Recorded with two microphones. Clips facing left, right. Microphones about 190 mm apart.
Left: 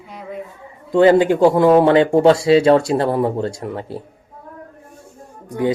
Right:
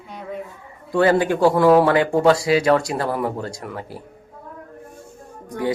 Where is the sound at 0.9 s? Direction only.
20° left (ahead or behind).